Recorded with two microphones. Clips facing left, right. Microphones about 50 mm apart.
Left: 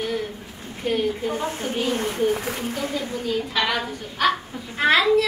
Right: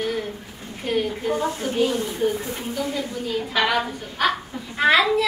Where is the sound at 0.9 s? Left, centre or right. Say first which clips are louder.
Even; centre.